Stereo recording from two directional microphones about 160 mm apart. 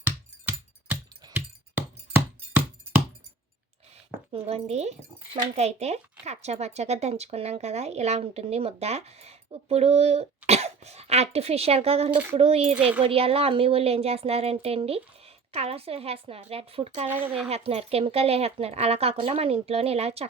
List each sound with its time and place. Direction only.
1.3 s a sound: 15° right (ahead or behind)
4.3 s speech: 40° right (ahead or behind)
12.1 s speech: 10° right (ahead or behind)
12.4 s speech: 40° right (ahead or behind)
12.7 s speech: 10° right (ahead or behind)
13.0 s speech: 35° right (ahead or behind)
17.1 s speech: 10° right (ahead or behind)
17.5 s speech: 40° right (ahead or behind)